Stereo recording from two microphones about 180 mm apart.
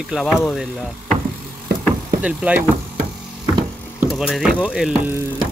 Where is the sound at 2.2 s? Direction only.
5° right (ahead or behind).